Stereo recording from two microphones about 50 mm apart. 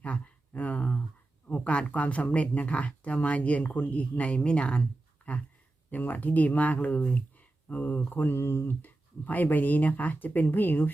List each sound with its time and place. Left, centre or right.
0.0 s a sound: left
1.5 s speech: left
8.8 s speech: left